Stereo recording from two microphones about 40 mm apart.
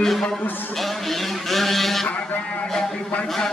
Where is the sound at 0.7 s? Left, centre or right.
Centre.